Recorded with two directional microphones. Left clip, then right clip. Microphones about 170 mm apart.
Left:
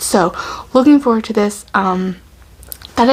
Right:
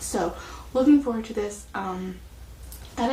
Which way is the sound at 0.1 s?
35° left (ahead or behind).